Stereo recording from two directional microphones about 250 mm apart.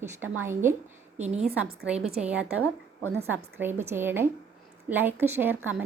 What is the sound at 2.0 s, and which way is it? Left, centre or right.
A woman's voice, centre.